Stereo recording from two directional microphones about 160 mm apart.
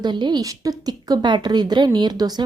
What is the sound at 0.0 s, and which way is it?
A woman's voice, 30° right (ahead or behind).